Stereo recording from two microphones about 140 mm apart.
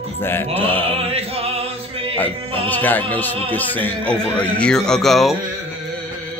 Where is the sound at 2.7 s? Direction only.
10° left (ahead or behind).